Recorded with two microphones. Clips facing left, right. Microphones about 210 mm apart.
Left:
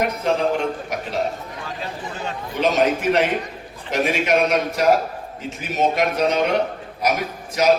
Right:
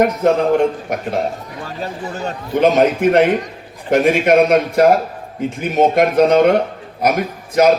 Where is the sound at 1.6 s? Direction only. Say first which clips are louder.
Right 6 dB; 45° right (ahead or behind).